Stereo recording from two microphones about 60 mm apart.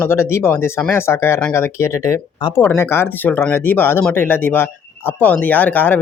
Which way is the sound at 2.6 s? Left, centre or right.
Left.